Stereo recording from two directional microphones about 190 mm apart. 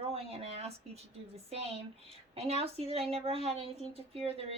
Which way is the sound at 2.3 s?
35° right (ahead or behind).